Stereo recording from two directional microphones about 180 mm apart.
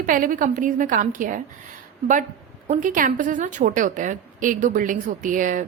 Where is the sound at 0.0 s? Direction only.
50° right (ahead or behind).